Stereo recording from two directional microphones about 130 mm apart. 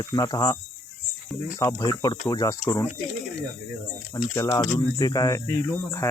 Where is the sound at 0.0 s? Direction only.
30° left (ahead or behind).